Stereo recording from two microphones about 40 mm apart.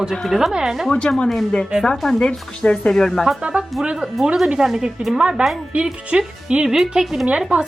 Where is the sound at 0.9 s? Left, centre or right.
Left.